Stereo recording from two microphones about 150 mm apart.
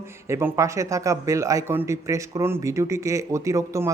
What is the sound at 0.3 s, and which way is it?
Speech, 20° right (ahead or behind).